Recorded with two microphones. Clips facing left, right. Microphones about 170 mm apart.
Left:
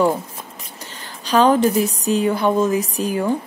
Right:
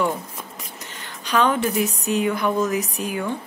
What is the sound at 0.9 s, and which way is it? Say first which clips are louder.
A woman's voice: left 5 dB; 35° left (ahead or behind).